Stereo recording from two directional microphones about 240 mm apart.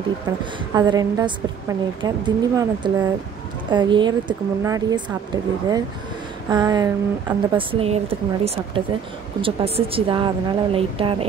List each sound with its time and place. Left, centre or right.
0.7 s a woman's voice: centre